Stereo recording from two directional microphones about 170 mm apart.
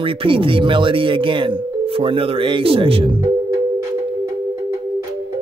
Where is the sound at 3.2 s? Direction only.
15° right (ahead or behind).